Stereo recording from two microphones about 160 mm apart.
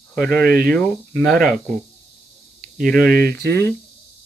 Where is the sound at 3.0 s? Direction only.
70° right (ahead or behind).